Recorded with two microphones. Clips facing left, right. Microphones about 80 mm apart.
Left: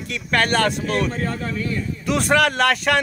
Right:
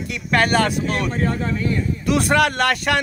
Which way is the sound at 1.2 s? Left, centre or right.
Right.